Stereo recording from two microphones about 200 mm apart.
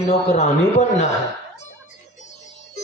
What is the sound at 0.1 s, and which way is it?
Speech, 35° left (ahead or behind).